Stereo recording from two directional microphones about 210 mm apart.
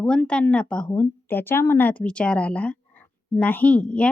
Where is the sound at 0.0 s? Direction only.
5° left (ahead or behind).